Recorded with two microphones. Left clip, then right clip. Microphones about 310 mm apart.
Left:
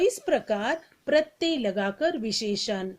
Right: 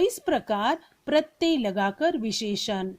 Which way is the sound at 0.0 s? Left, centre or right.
Right.